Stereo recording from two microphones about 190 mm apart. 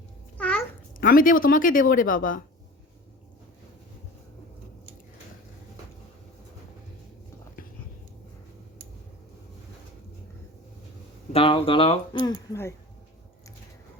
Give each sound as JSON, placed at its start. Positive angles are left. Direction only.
{"t": 0.3, "sound": "babbling", "side_deg": 5}
{"t": 0.9, "sound": "speech", "side_deg": 45}
{"t": 11.3, "sound": "speech", "side_deg": 30}